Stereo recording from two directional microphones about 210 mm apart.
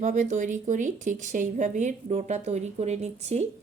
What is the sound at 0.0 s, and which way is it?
Speech, 35° right (ahead or behind).